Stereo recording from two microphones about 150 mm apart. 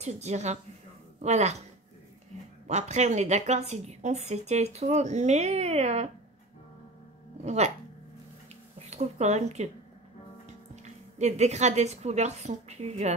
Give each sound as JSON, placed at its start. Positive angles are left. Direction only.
{"t": 0.0, "sound": "a woman's voice", "side_deg": -50}
{"t": 2.6, "sound": "a woman's voice", "side_deg": -50}
{"t": 7.4, "sound": "a woman's voice", "side_deg": -50}
{"t": 8.7, "sound": "speech", "side_deg": -50}
{"t": 10.8, "sound": "a woman's voice", "side_deg": -50}